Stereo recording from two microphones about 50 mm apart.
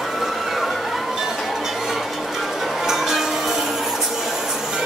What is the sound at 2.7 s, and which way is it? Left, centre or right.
Music, centre.